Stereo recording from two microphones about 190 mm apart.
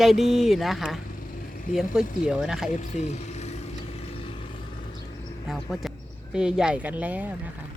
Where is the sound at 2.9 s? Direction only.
40° left (ahead or behind).